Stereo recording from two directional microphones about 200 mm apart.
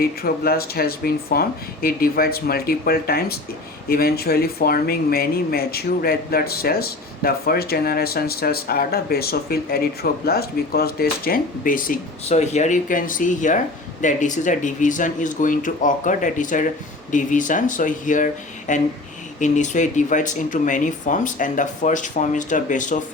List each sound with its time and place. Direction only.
0.0 s speech: 50° left (ahead or behind)